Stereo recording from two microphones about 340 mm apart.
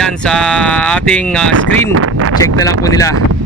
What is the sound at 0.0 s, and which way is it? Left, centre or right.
Speech, centre.